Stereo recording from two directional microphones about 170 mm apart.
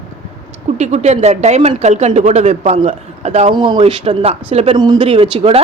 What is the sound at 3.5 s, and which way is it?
Speech, 25° right (ahead or behind).